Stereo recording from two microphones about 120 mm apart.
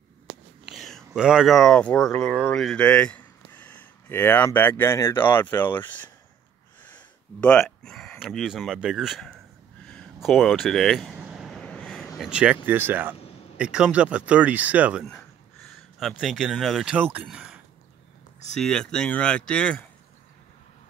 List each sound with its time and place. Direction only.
0.7 s speech: centre (ahead or behind)
11.1 s vehicle: 5° right (ahead or behind)
11.6 s a sound: 10° left (ahead or behind)
12.2 s speech: 10° right (ahead or behind)
15.7 s a man's voice: centre (ahead or behind)
16.9 s speech: 10° right (ahead or behind)
18.6 s speech: 5° left (ahead or behind)